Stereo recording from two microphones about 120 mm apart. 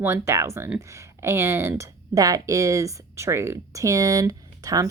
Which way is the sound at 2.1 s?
30° right (ahead or behind).